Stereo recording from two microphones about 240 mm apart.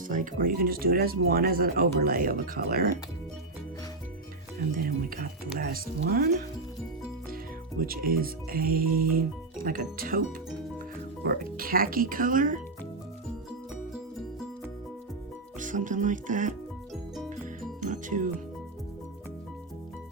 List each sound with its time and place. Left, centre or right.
0.1 s speech: right
4.8 s speech: right
7.8 s speech: right
15.5 s speech: right
17.7 s music: right